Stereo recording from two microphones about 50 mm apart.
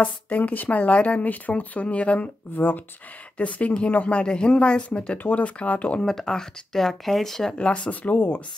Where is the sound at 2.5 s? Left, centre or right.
Left; by 5.2 s centre.